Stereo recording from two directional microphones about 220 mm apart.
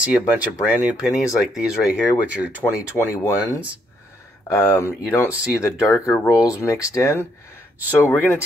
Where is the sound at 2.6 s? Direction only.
15° left (ahead or behind).